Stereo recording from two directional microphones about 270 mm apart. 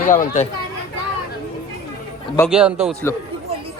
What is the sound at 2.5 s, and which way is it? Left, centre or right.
Speech, centre.